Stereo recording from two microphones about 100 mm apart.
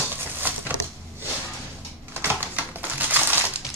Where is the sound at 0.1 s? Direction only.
20° right (ahead or behind).